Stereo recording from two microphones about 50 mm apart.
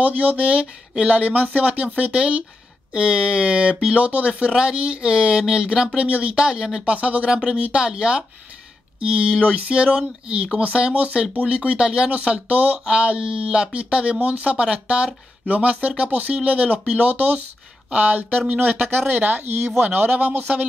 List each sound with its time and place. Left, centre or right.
0.0 s speech: right